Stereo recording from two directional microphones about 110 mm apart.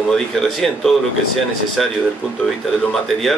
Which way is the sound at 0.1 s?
5° left (ahead or behind).